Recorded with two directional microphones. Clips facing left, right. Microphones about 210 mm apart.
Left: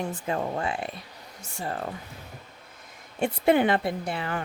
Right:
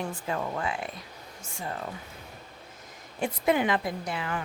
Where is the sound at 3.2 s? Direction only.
30° left (ahead or behind).